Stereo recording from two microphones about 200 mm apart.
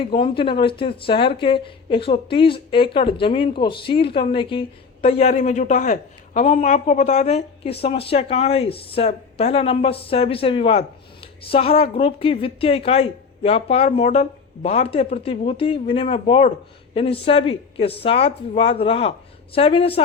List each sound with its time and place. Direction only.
0.0 s speech: 25° left (ahead or behind)